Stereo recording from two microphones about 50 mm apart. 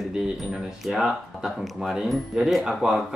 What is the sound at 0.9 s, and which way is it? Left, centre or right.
Speech, centre.